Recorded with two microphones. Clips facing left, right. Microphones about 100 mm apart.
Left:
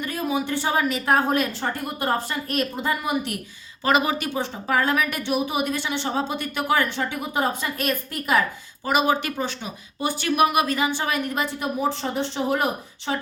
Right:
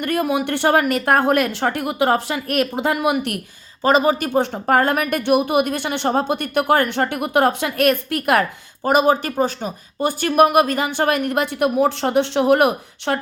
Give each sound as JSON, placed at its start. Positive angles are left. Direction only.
{"t": 0.0, "sound": "speech", "side_deg": -65}
{"t": 3.8, "sound": "speech", "side_deg": -35}